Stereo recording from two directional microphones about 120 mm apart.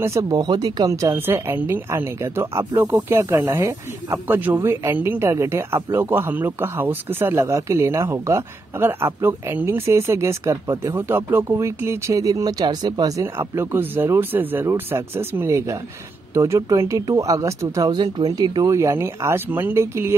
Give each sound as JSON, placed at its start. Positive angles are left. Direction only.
{"t": 0.0, "sound": "speech", "side_deg": -30}
{"t": 17.9, "sound": "speech", "side_deg": -40}